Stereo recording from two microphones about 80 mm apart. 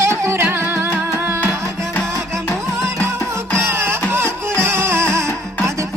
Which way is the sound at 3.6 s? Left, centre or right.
Right.